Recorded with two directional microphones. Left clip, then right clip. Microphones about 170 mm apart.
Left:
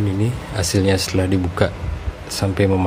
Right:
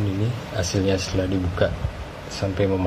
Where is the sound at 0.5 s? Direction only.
55° left (ahead or behind).